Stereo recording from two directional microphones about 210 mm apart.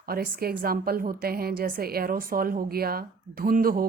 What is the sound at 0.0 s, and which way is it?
A woman's voice, 45° right (ahead or behind).